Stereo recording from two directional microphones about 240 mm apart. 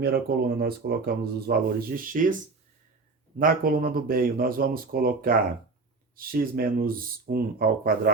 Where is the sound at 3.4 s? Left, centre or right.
Right.